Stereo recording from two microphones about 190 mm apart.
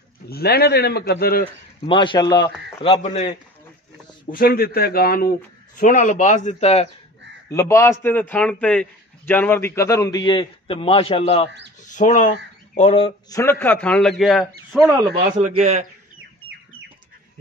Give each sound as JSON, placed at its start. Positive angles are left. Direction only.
{"t": 0.3, "sound": "a man's voice", "side_deg": 55}
{"t": 1.9, "sound": "a man's voice", "side_deg": 25}
{"t": 2.8, "sound": "a man's voice", "side_deg": 35}
{"t": 4.3, "sound": "a man's voice", "side_deg": 50}
{"t": 7.4, "sound": "a man's voice", "side_deg": 15}
{"t": 11.8, "sound": "speech", "side_deg": 40}
{"t": 12.7, "sound": "a man's voice", "side_deg": 30}
{"t": 13.3, "sound": "a man's voice", "side_deg": 15}
{"t": 15.4, "sound": "a man's voice", "side_deg": -40}